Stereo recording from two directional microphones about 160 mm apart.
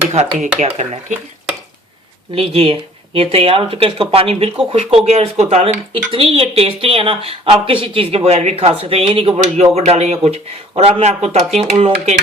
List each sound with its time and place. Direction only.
0.6 s speech: 45° right (ahead or behind)
2.3 s speech: 35° right (ahead or behind)